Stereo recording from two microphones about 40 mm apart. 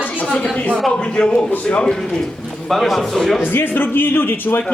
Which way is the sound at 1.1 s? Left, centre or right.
Left.